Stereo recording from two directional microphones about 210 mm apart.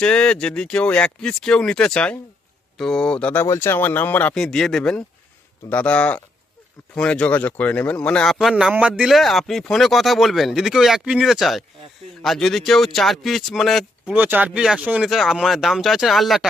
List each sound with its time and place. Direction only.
0.0 s a man's voice: 5° left (ahead or behind)